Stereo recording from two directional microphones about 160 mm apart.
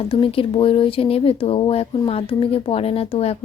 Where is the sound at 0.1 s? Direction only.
35° left (ahead or behind).